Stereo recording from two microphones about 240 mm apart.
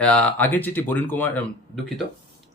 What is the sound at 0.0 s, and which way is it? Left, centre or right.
Speech, centre.